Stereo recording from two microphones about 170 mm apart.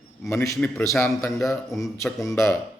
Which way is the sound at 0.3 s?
15° left (ahead or behind).